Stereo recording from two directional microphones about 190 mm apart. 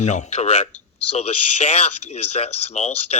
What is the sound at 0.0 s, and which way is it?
Speech, 35° left (ahead or behind).